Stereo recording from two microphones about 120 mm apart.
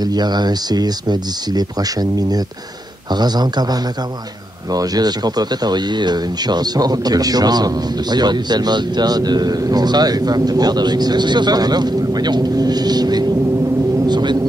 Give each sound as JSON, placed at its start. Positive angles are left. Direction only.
{"t": 0.0, "sound": "speech", "side_deg": -35}
{"t": 4.7, "sound": "speech", "side_deg": -35}
{"t": 14.0, "sound": "vehicle", "side_deg": -40}